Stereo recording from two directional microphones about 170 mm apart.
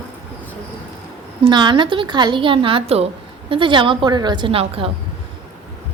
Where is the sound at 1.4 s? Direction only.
30° right (ahead or behind).